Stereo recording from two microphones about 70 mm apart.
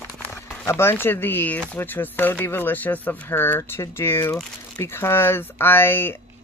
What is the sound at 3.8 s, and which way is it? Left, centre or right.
Speech, left.